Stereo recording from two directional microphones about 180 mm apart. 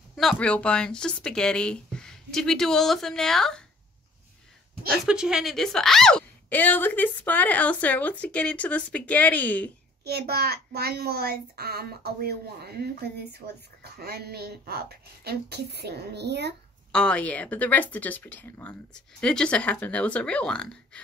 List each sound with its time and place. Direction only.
0.1 s speech: centre (ahead or behind)
5.0 s speech: 5° right (ahead or behind)
10.0 s a child's voice: 65° right (ahead or behind)
16.9 s speech: 5° left (ahead or behind)